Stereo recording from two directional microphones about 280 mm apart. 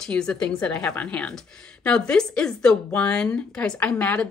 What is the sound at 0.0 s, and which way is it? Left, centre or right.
Speech, centre.